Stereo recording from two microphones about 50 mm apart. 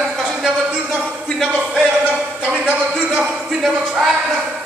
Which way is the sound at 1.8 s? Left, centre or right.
Right.